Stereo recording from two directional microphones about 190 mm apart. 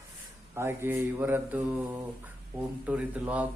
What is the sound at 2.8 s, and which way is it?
Mantra, 5° right (ahead or behind).